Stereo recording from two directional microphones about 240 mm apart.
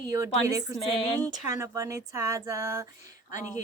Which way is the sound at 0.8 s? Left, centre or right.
Centre.